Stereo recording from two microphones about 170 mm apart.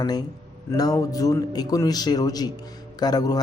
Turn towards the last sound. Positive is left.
turn(degrees=25)  # may be behind; listen again after turning